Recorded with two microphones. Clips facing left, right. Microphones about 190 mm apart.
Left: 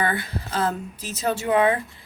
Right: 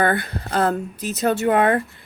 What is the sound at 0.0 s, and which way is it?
Speech, 60° right (ahead or behind).